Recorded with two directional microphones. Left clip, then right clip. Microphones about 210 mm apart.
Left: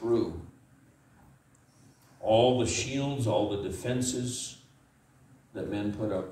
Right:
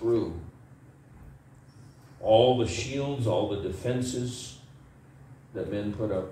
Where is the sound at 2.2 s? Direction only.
50° left (ahead or behind).